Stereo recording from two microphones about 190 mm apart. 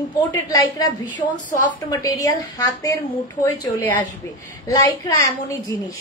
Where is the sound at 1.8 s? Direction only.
15° left (ahead or behind).